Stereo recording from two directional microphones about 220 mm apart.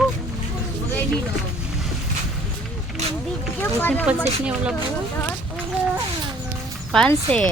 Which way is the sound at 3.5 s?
10° left (ahead or behind).